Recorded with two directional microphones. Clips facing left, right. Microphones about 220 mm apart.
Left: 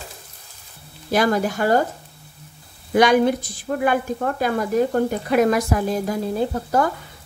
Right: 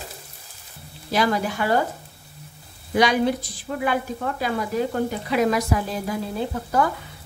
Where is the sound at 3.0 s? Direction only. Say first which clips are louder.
Left 4 dB; 50° left (ahead or behind).